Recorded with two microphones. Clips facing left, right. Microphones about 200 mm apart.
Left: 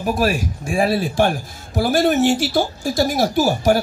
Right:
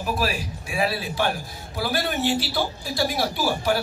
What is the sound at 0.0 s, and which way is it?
Speech, 45° left (ahead or behind).